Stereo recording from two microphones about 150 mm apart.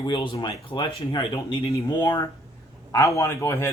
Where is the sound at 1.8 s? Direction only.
25° left (ahead or behind).